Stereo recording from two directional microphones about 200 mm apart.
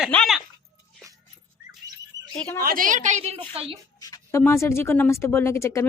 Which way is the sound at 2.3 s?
5° left (ahead or behind).